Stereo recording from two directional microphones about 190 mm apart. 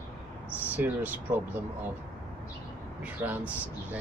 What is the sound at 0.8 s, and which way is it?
Speech, 10° right (ahead or behind).